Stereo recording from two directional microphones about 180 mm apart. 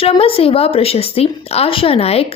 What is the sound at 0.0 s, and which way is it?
A woman's voice, 30° left (ahead or behind).